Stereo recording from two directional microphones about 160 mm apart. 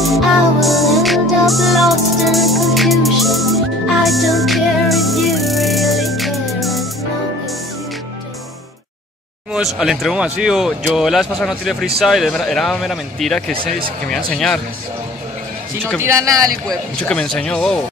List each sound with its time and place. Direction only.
0.0 s music: centre (ahead or behind)
9.5 s speech: 5° right (ahead or behind)
16.0 s speech: 20° right (ahead or behind)
16.6 s speech: 5° left (ahead or behind)